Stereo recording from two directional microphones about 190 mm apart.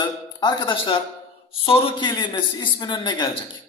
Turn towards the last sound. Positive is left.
turn(degrees=25)  # may be behind; listen again after turning